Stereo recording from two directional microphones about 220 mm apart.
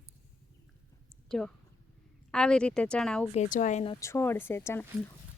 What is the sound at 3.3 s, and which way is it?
Speech, 35° left (ahead or behind).